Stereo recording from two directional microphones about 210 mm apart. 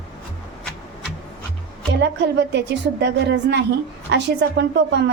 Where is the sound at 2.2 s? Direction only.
55° right (ahead or behind).